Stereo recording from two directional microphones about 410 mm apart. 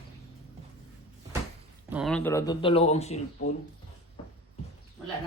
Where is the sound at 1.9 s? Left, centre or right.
Centre.